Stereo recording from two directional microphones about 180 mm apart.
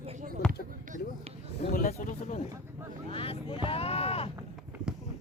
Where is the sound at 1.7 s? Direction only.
50° left (ahead or behind).